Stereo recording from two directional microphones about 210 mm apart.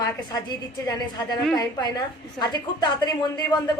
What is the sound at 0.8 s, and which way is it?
A woman's voice, 20° left (ahead or behind).